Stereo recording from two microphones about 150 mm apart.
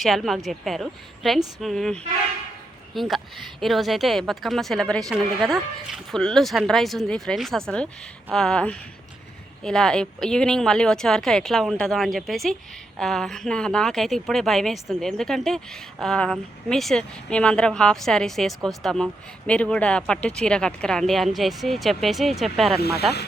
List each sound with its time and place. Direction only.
0.0 s a woman's voice: centre (ahead or behind)
22.8 s speech: 90° left